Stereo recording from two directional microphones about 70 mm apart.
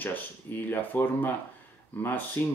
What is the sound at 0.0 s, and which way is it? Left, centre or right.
Speech, left.